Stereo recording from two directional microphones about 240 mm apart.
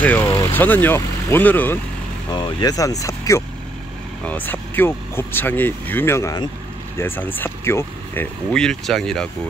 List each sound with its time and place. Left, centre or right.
0.0 s speech: centre